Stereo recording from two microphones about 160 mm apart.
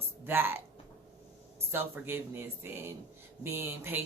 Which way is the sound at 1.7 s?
15° right (ahead or behind).